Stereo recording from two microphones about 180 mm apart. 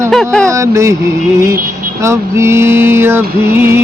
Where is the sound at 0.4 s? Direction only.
15° right (ahead or behind).